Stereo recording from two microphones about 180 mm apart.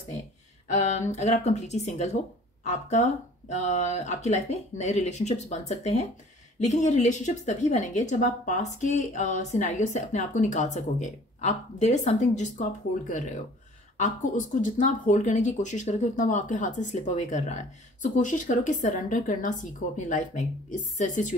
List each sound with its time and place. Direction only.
0.7 s a woman's voice: 40° left (ahead or behind)